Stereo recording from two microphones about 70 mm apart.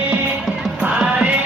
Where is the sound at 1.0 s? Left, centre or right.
Centre.